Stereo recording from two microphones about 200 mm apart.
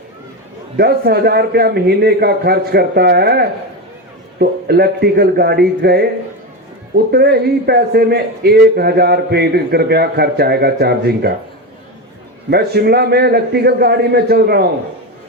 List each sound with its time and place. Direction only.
0.8 s a man's voice: 50° right (ahead or behind)
12.5 s a man's voice: 55° right (ahead or behind)